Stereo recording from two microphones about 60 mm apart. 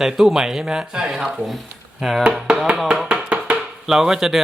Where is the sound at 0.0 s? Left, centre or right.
Centre.